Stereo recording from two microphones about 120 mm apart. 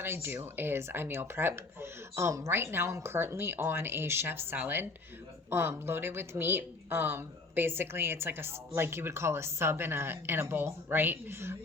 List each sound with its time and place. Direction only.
0.0 s speech: 20° right (ahead or behind)